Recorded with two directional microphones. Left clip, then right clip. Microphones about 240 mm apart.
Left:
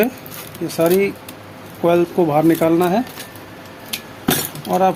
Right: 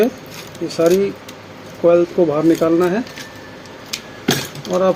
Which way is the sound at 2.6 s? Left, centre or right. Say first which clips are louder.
Even; left.